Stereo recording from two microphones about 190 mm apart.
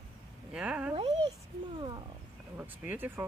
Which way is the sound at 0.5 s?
5° right (ahead or behind).